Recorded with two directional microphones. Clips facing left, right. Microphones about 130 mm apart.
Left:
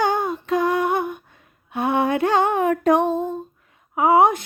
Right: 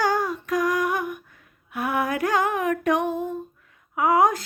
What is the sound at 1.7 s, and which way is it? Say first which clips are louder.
Child singing: left 5 dB; 25° left (ahead or behind).